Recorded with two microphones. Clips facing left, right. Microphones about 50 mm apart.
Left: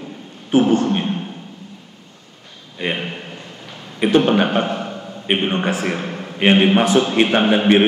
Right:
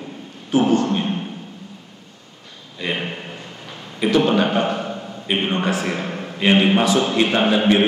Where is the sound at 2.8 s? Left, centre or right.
Left.